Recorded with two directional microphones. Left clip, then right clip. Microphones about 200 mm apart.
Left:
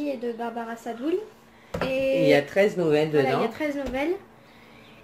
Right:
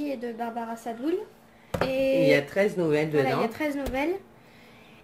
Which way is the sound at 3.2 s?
25° right (ahead or behind).